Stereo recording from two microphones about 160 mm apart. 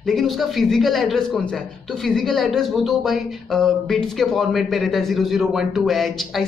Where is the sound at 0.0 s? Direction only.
Centre (ahead or behind).